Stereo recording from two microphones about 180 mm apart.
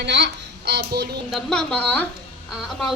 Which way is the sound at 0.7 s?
65° right (ahead or behind).